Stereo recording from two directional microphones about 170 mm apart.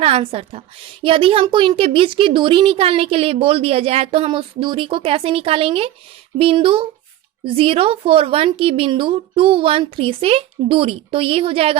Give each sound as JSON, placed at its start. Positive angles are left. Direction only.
{"t": 0.0, "sound": "a woman's voice", "side_deg": -35}